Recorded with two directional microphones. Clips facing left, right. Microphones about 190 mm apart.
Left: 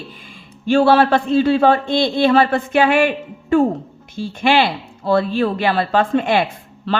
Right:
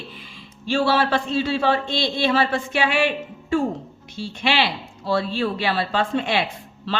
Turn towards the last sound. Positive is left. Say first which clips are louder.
# left 5 dB
turn(degrees=50)  # may be behind; listen again after turning